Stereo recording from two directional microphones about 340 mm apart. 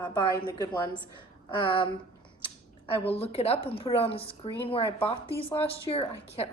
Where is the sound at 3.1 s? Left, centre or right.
Centre.